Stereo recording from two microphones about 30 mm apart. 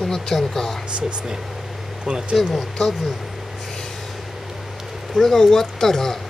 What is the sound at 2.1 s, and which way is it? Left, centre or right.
Speech, right.